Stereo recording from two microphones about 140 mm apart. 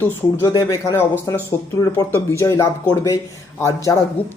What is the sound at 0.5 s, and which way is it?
Speech, 25° left (ahead or behind).